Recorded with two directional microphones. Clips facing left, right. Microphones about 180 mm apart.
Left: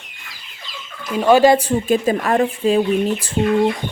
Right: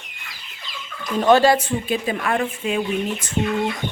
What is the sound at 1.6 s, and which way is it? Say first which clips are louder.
Speech: left 6 dB; 40° left (ahead or behind).